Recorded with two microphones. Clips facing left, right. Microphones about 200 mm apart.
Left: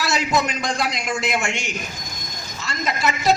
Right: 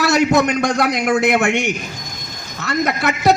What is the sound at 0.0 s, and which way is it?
A man's voice, 60° right (ahead or behind).